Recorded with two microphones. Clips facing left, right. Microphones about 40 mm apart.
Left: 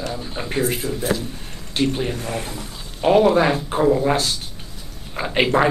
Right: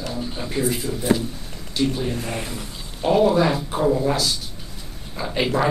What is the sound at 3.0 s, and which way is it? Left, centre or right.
Speech, left.